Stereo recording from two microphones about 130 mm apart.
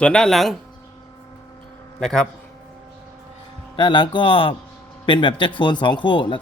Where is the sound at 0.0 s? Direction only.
5° left (ahead or behind).